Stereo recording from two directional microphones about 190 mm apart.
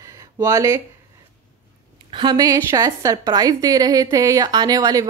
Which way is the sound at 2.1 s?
20° right (ahead or behind).